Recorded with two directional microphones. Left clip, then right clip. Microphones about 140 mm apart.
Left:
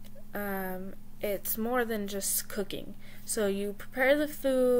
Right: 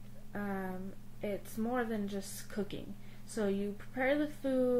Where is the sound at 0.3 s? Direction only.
20° left (ahead or behind).